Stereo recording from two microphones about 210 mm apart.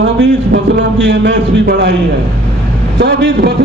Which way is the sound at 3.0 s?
55° right (ahead or behind).